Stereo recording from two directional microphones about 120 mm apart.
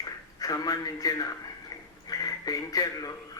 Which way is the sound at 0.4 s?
30° left (ahead or behind).